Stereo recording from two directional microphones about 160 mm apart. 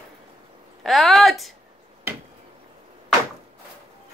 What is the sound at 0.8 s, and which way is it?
Speech, centre (ahead or behind).